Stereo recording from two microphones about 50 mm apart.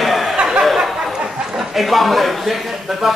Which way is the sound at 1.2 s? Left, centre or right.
Centre.